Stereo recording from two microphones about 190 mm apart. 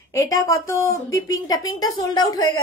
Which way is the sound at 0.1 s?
15° left (ahead or behind).